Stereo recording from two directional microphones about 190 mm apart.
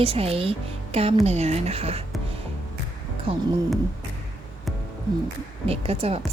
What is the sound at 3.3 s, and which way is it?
Speech, 30° right (ahead or behind).